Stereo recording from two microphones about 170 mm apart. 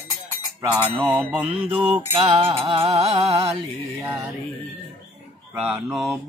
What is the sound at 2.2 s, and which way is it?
Music, 30° right (ahead or behind).